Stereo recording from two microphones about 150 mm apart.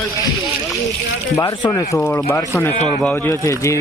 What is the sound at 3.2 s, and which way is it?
Speech, 20° left (ahead or behind).